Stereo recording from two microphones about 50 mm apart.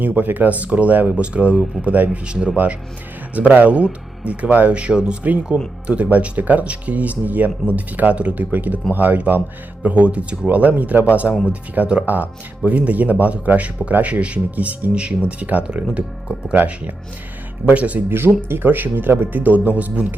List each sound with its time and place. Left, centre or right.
0.0 s speech: right
3.3 s speech: right
16.6 s speech: right
18.1 s speech: right